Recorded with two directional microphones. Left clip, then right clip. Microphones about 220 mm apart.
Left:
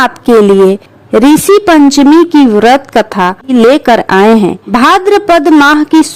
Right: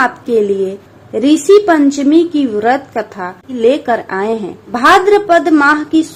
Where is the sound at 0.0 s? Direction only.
50° left (ahead or behind).